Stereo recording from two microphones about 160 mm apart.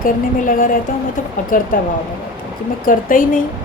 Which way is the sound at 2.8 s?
60° left (ahead or behind).